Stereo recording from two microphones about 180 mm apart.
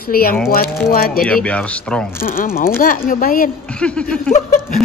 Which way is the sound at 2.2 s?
50° left (ahead or behind).